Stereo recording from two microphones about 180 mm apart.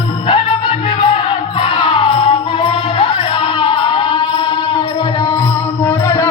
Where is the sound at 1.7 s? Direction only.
30° left (ahead or behind).